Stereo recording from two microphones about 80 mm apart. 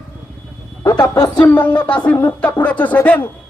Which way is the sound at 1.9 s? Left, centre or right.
Centre.